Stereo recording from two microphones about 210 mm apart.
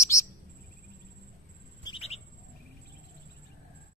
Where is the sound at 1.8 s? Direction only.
30° left (ahead or behind).